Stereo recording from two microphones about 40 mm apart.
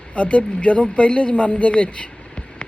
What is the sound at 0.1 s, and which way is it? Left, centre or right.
Speech, left.